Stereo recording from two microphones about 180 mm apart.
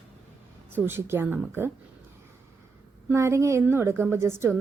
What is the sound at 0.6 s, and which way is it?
A woman's voice, 10° right (ahead or behind).